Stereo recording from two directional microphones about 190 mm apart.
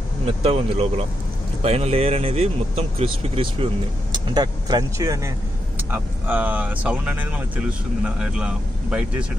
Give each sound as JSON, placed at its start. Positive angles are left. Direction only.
{"t": 0.3, "sound": "speech", "side_deg": -30}